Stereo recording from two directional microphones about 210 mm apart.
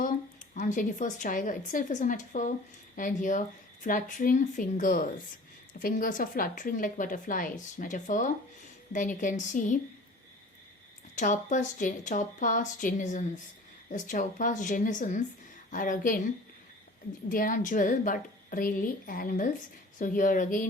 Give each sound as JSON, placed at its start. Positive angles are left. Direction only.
{"t": 0.0, "sound": "speech", "side_deg": 40}
{"t": 11.1, "sound": "speech", "side_deg": 35}